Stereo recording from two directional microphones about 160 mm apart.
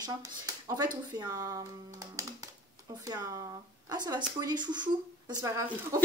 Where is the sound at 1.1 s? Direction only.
20° right (ahead or behind).